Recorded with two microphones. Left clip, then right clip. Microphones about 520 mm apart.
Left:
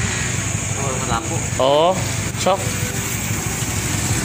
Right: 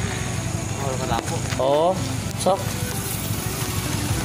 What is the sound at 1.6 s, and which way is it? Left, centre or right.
Speech, right.